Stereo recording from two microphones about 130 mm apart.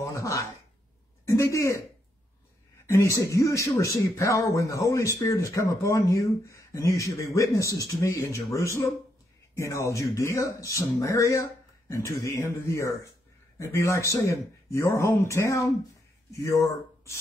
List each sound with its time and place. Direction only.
0.0 s a sound: 25° left (ahead or behind)
1.3 s speech: 25° left (ahead or behind)
2.9 s speech: 20° left (ahead or behind)